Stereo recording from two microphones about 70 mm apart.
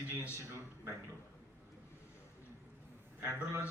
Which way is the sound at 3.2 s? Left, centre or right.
Right.